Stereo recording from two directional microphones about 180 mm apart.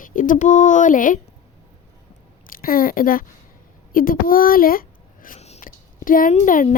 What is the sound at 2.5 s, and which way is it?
A child's voice, 55° left (ahead or behind).